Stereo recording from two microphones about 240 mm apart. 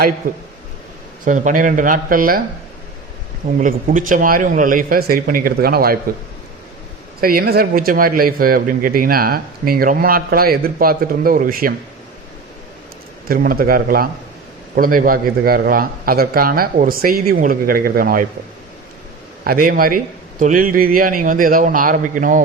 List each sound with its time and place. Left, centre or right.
1.2 s speech: right
3.6 s speech: right
7.2 s speech: right
13.2 s speech: right
19.5 s speech: right